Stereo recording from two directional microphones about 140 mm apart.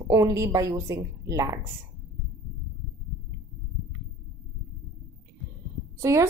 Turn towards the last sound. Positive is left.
turn(degrees=-20)  # may be behind; listen again after turning